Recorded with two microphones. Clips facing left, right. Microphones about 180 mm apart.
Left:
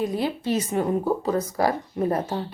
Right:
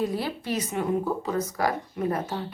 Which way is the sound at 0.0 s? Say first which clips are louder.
Left 3 dB; 20° left (ahead or behind).